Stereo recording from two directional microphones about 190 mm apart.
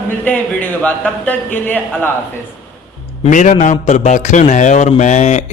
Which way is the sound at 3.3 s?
40° left (ahead or behind).